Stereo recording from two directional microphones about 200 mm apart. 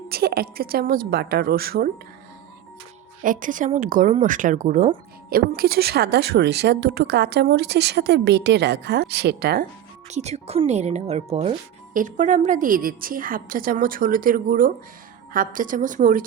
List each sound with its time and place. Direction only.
0.1 s a woman's voice: 50° right (ahead or behind)
3.2 s speech: 40° right (ahead or behind)
10.1 s a woman's voice: 35° right (ahead or behind)